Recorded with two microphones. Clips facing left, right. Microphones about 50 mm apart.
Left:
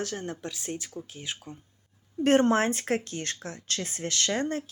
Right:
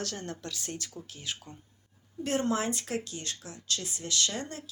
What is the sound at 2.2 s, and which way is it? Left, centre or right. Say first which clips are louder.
Speech: left 7 dB; left.